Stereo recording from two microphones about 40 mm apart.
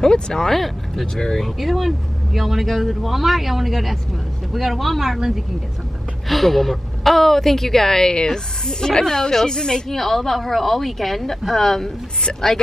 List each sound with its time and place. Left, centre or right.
0.0 s a woman's voice: centre
9.8 s speech: centre